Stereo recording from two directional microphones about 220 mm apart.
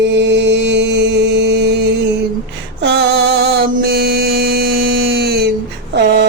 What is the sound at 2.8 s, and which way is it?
Mantra, 50° right (ahead or behind).